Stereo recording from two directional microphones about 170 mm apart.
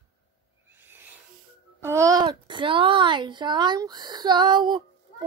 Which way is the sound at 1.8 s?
15° right (ahead or behind).